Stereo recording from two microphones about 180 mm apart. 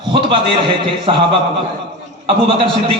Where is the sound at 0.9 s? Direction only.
30° right (ahead or behind).